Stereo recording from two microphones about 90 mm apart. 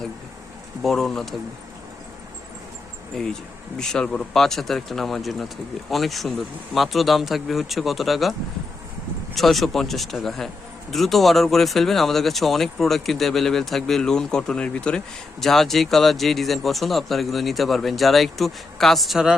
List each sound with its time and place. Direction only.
0.8 s speech: centre (ahead or behind)
3.1 s speech: 5° left (ahead or behind)